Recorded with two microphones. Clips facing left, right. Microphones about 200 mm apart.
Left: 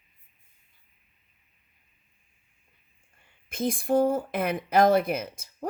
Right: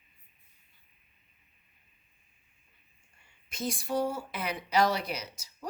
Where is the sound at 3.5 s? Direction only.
55° left (ahead or behind).